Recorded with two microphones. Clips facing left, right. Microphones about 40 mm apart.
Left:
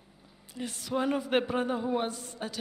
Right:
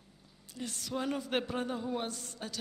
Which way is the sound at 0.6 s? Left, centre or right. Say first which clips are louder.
Left 6 dB; centre.